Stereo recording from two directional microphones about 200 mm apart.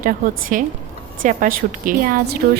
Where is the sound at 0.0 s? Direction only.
45° right (ahead or behind).